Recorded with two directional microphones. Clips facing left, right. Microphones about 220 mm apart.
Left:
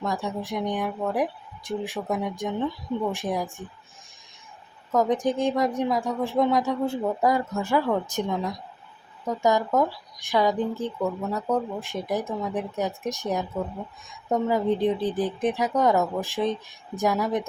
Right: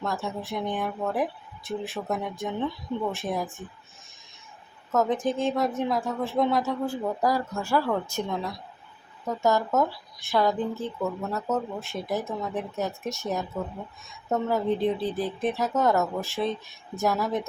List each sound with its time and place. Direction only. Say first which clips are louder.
0.0 s speech: left 2 dB; 15° left (ahead or behind)
4.9 s speech: left 2 dB; 15° left (ahead or behind)